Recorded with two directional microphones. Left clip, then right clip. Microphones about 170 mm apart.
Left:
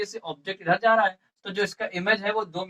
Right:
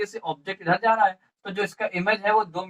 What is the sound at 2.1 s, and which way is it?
Speech, 40° left (ahead or behind).